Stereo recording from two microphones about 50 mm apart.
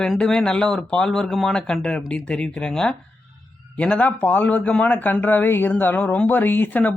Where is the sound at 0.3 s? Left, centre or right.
Centre.